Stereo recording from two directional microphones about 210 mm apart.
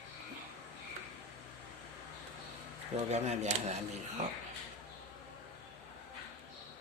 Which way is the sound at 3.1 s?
30° right (ahead or behind).